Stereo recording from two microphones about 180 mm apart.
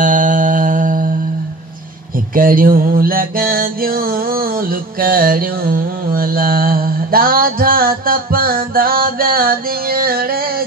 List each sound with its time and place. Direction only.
0.0 s mantra: 45° right (ahead or behind)
2.3 s mantra: 50° right (ahead or behind)